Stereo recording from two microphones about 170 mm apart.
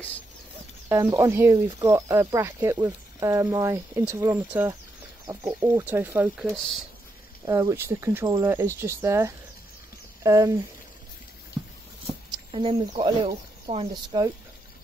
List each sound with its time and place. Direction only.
0.8 s speech: 15° right (ahead or behind)
6.5 s speech: 5° left (ahead or behind)
7.4 s speech: 20° right (ahead or behind)
12.4 s speech: 30° right (ahead or behind)